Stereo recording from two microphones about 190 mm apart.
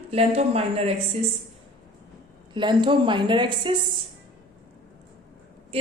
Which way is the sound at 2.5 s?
25° right (ahead or behind).